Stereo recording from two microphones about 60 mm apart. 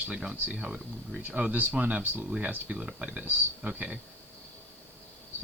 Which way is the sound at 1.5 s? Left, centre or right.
Right.